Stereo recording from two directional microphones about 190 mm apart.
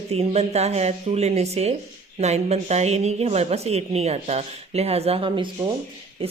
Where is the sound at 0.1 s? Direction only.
35° right (ahead or behind).